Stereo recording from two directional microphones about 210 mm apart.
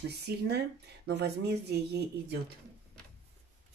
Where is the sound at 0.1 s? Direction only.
50° right (ahead or behind).